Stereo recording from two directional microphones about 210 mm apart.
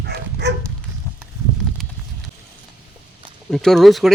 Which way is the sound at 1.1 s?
10° left (ahead or behind).